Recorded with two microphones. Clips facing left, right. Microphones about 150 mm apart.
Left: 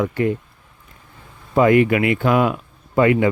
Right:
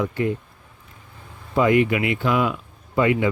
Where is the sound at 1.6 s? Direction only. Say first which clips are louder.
Left 4 dB; 55° left (ahead or behind).